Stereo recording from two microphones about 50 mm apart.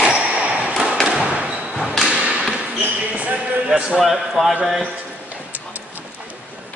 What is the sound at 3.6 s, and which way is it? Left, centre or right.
Speech, centre.